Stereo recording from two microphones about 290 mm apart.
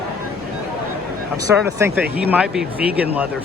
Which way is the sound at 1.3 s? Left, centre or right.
Centre.